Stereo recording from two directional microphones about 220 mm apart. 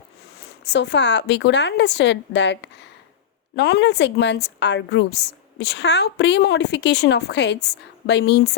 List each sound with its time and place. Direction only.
0.6 s a woman's voice: 50° left (ahead or behind)